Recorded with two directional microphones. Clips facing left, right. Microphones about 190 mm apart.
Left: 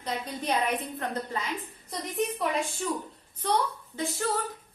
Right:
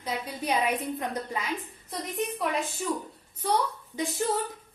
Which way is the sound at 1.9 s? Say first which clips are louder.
Left 1 dB; centre (ahead or behind).